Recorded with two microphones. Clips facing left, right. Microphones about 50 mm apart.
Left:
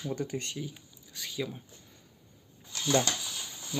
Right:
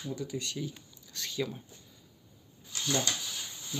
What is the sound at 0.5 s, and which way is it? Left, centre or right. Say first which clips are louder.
Speech: right 1 dB; centre.